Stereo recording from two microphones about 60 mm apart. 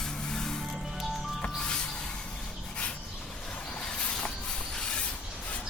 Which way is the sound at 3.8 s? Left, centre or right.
Centre.